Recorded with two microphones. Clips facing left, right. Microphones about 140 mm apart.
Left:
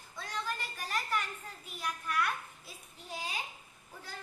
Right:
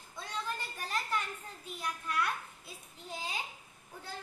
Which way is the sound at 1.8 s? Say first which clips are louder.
Left 1 dB; 25° right (ahead or behind).